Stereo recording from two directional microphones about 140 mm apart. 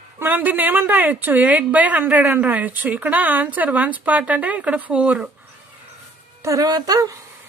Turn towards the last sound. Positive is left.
turn(degrees=-25)  # may be behind; listen again after turning